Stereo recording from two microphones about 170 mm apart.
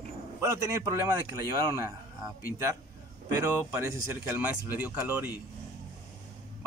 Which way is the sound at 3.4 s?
15° right (ahead or behind).